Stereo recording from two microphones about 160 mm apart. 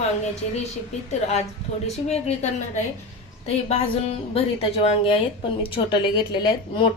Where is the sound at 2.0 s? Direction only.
45° left (ahead or behind).